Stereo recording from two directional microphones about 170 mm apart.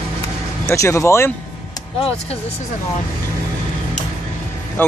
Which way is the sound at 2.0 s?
35° left (ahead or behind).